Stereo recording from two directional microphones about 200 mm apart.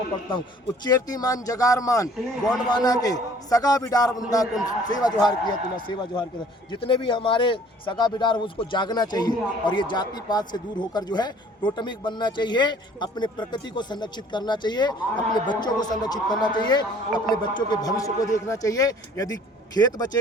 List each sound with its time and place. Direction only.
0.9 s a man's voice: 20° left (ahead or behind)